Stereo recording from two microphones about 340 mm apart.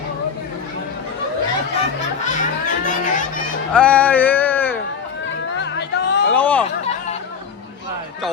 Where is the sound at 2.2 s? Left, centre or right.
Left.